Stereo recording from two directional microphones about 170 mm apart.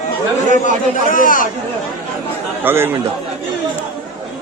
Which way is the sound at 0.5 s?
50° left (ahead or behind).